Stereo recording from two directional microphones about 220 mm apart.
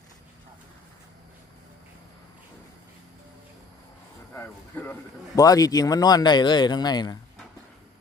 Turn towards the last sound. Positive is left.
turn(degrees=20)  # may be behind; listen again after turning